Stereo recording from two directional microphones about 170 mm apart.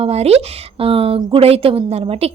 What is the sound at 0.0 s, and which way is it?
Speech, 35° right (ahead or behind).